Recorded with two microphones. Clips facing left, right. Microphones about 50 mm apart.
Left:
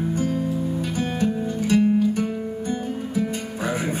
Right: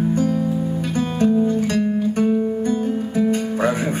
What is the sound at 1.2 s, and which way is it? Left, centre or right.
Music, right.